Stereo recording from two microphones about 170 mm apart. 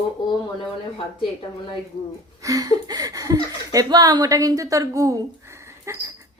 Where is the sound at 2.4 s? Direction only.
20° right (ahead or behind).